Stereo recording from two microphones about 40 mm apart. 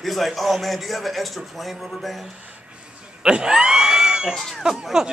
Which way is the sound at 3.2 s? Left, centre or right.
Right.